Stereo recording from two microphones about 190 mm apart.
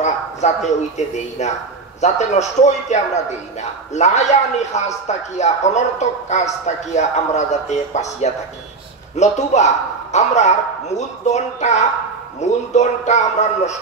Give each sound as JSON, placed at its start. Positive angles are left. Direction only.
{"t": 0.0, "sound": "a man's voice", "side_deg": 35}